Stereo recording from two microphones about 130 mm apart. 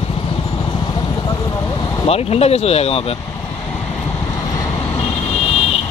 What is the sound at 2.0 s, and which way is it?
Speech, 50° left (ahead or behind).